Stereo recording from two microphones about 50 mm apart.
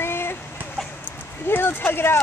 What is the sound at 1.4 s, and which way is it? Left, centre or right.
Speech, left.